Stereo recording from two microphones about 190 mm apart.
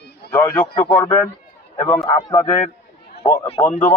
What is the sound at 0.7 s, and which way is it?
Speech, 20° left (ahead or behind).